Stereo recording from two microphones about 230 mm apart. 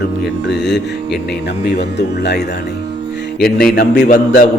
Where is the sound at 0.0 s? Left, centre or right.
Left.